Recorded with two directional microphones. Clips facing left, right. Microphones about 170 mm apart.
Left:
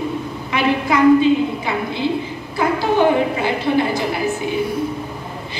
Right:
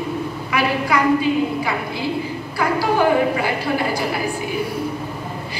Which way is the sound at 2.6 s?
20° left (ahead or behind).